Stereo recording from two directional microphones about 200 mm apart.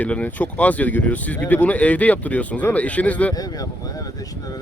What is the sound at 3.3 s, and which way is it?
Speech, 20° left (ahead or behind).